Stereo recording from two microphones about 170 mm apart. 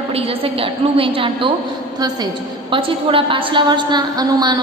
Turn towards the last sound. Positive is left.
turn(degrees=-25)  # may be behind; listen again after turning